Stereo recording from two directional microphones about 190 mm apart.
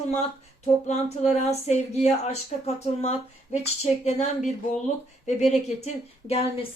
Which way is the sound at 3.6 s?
35° left (ahead or behind).